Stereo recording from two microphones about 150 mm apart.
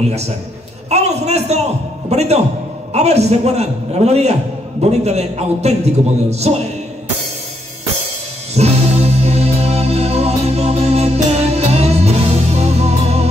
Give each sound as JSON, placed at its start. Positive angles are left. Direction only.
{"t": 0.8, "sound": "a sound", "side_deg": -45}
{"t": 2.0, "sound": "a man's voice", "side_deg": -45}
{"t": 8.5, "sound": "music", "side_deg": -45}